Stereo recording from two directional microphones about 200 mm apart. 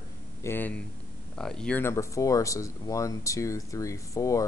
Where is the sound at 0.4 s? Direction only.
10° left (ahead or behind).